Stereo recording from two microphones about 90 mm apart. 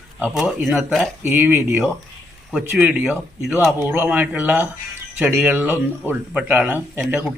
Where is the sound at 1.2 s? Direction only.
25° right (ahead or behind).